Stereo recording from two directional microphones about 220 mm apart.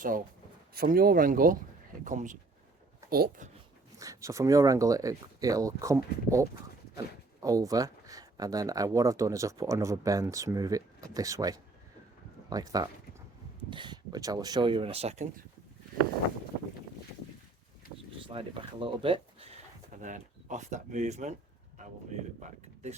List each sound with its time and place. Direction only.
0.7 s speech: 40° right (ahead or behind)
3.9 s speech: 15° right (ahead or behind); by 15.4 s 30° right (ahead or behind)
17.8 s a sound: 40° left (ahead or behind)
18.3 s speech: 25° right (ahead or behind)